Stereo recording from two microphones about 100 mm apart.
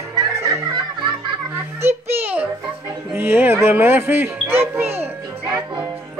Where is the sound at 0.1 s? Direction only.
30° right (ahead or behind).